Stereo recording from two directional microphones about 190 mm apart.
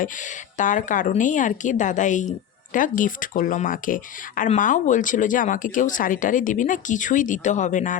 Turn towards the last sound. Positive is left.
turn(degrees=40)  # may be behind; listen again after turning